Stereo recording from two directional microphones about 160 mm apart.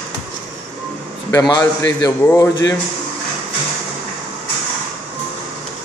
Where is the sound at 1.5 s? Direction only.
20° left (ahead or behind).